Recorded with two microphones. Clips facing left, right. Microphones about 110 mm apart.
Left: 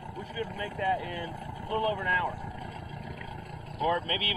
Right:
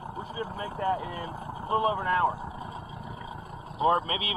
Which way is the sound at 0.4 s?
20° right (ahead or behind).